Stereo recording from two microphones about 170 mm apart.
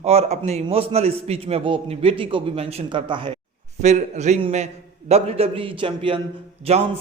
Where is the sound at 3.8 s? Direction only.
45° right (ahead or behind).